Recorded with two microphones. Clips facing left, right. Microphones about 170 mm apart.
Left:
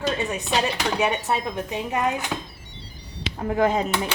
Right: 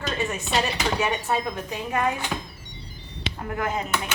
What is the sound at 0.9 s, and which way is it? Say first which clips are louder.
A woman's voice: left 2 dB; 15° left (ahead or behind).